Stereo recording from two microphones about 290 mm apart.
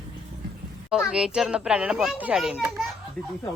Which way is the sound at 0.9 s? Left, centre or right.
Centre.